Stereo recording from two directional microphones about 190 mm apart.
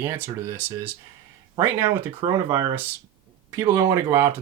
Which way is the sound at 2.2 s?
25° right (ahead or behind).